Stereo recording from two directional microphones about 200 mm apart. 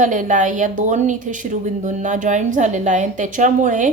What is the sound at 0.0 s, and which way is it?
A woman's voice, 40° right (ahead or behind).